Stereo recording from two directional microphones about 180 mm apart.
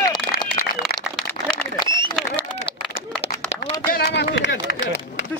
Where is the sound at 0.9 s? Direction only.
5° left (ahead or behind).